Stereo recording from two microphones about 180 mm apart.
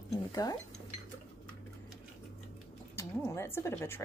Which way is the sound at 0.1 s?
20° left (ahead or behind).